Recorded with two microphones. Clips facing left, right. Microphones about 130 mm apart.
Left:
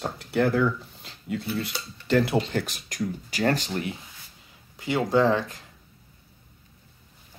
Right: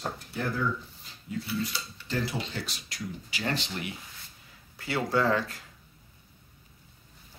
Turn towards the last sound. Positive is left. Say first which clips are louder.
# left 5 dB
turn(degrees=20)  # may be behind; listen again after turning